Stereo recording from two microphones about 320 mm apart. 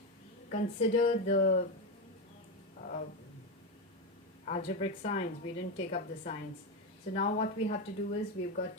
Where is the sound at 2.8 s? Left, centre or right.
Left.